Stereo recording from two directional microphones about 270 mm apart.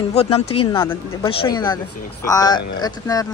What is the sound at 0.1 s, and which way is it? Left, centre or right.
Speech, left.